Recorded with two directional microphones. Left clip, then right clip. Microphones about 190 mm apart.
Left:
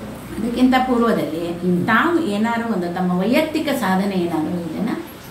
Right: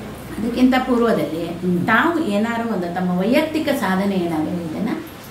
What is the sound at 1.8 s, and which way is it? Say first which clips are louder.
A woman's voice: even; 15° right (ahead or behind).